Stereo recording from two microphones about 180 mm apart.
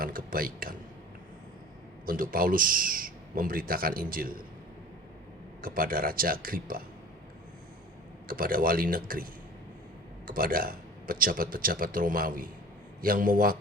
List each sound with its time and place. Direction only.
0.0 s a sound: 55° right (ahead or behind)
2.0 s a man's voice: 50° right (ahead or behind)
5.6 s a man's voice: 55° right (ahead or behind)
8.3 s a man's voice: 55° right (ahead or behind)